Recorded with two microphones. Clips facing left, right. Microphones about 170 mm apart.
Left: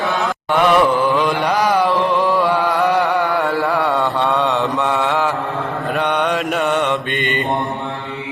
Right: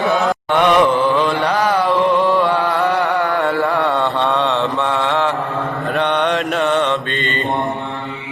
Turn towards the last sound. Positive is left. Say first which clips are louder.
# left 1 dB
turn(degrees=15)  # may be behind; listen again after turning